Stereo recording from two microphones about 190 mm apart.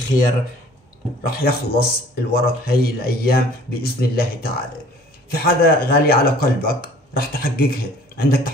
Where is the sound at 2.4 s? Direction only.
50° left (ahead or behind).